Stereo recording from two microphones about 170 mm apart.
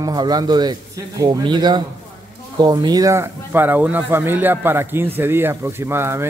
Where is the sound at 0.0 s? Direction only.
25° right (ahead or behind).